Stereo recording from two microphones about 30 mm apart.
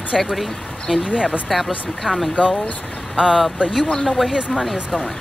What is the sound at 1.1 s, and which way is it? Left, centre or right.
Speech, right.